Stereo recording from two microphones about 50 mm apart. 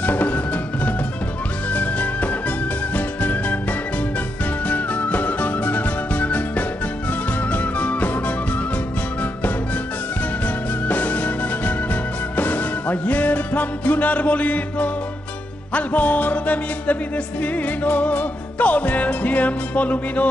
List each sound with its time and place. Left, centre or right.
0.0 s music: left
1.7 s music: left
4.6 s music: left
10.4 s music: left